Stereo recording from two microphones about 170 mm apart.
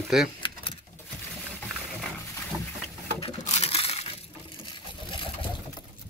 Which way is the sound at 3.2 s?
35° left (ahead or behind).